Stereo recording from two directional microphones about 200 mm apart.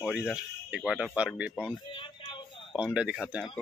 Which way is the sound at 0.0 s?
5° right (ahead or behind).